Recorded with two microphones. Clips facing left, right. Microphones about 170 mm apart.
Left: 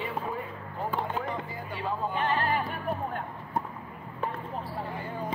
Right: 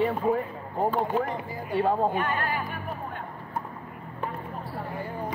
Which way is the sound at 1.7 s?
45° right (ahead or behind).